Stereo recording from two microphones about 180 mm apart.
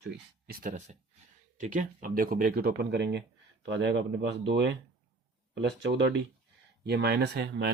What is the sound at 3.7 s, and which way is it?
Speech, 80° right.